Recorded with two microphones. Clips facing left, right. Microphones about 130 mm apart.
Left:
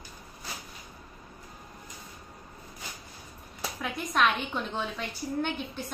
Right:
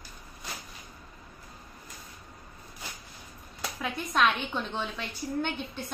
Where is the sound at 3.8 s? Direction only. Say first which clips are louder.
Even; centre (ahead or behind).